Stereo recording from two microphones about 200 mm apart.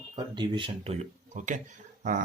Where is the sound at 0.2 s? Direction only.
25° right (ahead or behind).